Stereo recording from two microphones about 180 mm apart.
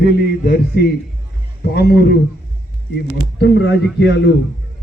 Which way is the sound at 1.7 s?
60° left (ahead or behind).